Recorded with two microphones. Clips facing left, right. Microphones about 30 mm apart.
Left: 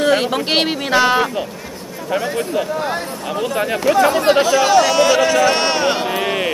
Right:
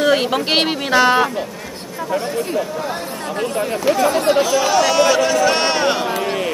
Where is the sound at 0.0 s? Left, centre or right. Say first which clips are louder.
Even; centre.